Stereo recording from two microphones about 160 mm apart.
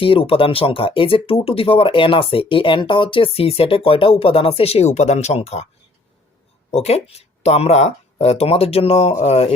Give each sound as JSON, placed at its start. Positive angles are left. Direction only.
{"t": 0.0, "sound": "speech", "side_deg": 35}
{"t": 6.7, "sound": "speech", "side_deg": 40}